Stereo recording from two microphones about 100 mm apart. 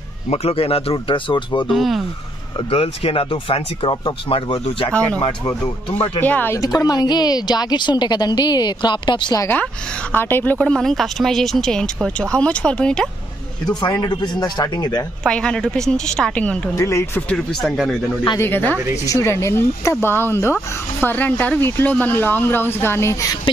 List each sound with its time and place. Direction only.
0.3 s a man's voice: 85° left
0.9 s a woman's voice: 55° left (ahead or behind)
1.7 s speech: centre (ahead or behind)
2.7 s speech: 80° left; by 4.4 s 55° left (ahead or behind)
4.5 s a man's voice: 70° left (ahead or behind)
4.9 s speech: 15° left (ahead or behind)
6.8 s a woman's voice: 40° left (ahead or behind)
10.1 s speech: 15° left (ahead or behind)
14.4 s speech: 40° left (ahead or behind)
15.2 s speech: 10° left (ahead or behind)
16.7 s speech: 30° left (ahead or behind)
17.6 s speech: centre (ahead or behind)
18.4 s speech: 20° left (ahead or behind)
19.0 s speech: 30° left (ahead or behind)